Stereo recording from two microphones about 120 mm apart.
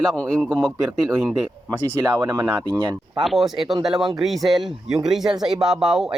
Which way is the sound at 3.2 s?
Centre (ahead or behind).